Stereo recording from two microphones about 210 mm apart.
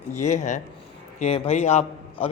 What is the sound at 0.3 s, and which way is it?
A man's voice, 35° left (ahead or behind).